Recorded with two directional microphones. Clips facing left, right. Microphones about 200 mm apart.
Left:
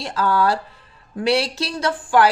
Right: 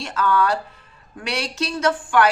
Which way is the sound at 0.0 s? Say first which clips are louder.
Left 1 dB; 35° left (ahead or behind).